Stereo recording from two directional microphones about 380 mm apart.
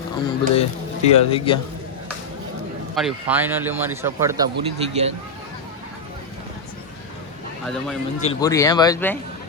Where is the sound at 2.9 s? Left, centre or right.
Centre.